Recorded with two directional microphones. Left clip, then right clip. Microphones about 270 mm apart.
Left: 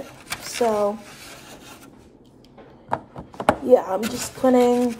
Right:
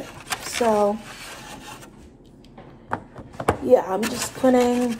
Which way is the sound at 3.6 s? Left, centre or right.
Centre.